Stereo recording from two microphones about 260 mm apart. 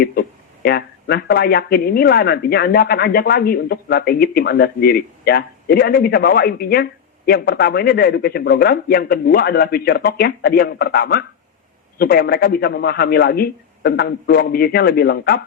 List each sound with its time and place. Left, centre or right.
0.0 s speech: left